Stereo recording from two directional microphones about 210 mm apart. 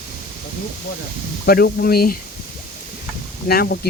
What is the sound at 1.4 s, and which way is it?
Speech, 45° left (ahead or behind).